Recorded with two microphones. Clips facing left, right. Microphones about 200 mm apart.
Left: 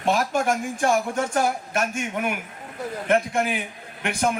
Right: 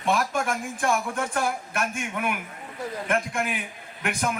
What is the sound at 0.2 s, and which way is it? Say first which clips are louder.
Speech: left 4 dB; 35° left (ahead or behind).